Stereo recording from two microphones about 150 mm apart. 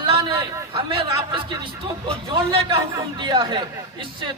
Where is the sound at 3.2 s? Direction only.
35° right (ahead or behind).